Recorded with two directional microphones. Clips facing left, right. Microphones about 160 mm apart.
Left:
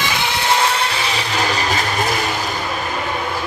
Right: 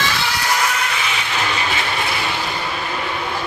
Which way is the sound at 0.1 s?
20° left (ahead or behind).